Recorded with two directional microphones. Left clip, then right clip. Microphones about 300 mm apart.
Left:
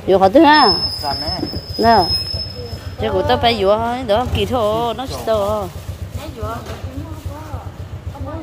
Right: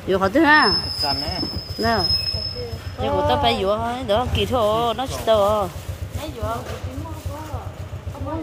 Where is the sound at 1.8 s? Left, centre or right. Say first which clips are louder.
Left 8 dB; centre.